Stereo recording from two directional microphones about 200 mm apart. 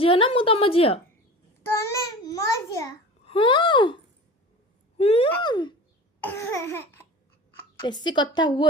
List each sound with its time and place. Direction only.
0.0 s a woman's voice: 25° left (ahead or behind)
1.6 s child singing: 15° left (ahead or behind)
3.2 s a sound: 25° left (ahead or behind)
4.9 s a woman's voice: 30° left (ahead or behind)
6.1 s a sound: 10° left (ahead or behind)
7.9 s a woman's voice: 20° left (ahead or behind)